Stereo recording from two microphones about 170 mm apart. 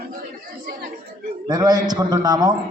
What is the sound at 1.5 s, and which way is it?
A man's voice, 25° right (ahead or behind).